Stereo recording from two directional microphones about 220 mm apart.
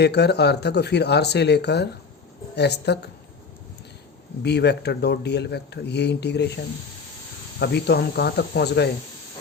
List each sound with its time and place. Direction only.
0.0 s speech: 50° left (ahead or behind)
4.4 s speech: 50° left (ahead or behind)
7.6 s speech: 50° left (ahead or behind)